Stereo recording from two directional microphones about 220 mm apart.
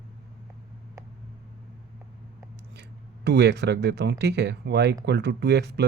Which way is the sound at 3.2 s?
50° right (ahead or behind).